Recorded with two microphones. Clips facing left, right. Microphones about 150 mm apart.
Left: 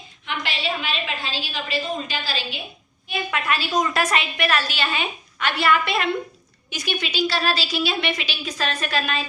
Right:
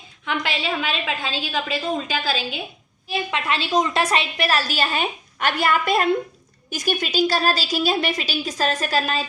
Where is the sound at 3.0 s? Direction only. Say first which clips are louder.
Right 1 dB; 30° right (ahead or behind).